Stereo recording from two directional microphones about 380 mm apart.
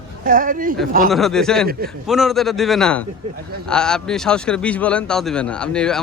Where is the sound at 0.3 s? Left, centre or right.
Right.